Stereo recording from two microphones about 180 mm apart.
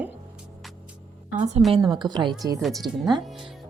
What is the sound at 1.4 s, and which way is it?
Speech, 40° right (ahead or behind).